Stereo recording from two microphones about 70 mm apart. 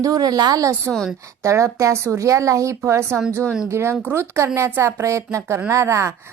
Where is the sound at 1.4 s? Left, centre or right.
Right.